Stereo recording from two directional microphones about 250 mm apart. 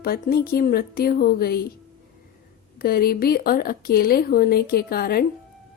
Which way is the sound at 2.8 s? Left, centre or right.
Left.